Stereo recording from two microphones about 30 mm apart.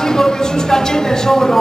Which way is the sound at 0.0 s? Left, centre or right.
Centre.